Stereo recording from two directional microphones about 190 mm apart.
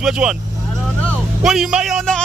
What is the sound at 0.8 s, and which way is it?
Vehicle, centre (ahead or behind).